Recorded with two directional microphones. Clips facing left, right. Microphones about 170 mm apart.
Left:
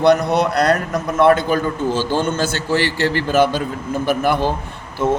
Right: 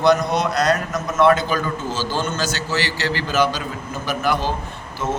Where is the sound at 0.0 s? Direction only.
60° left (ahead or behind).